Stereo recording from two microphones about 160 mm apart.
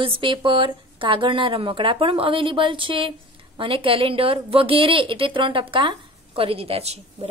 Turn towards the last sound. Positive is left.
turn(degrees=-40)  # may be behind; listen again after turning